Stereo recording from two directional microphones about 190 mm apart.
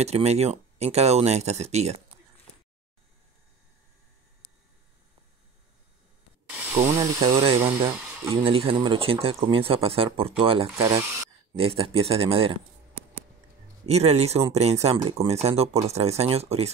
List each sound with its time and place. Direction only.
0.0 s speech: 35° right (ahead or behind)
7.0 s speech: 25° right (ahead or behind)
10.8 s speech: 15° right (ahead or behind)
11.5 s speech: 30° right (ahead or behind)
13.8 s speech: 35° right (ahead or behind)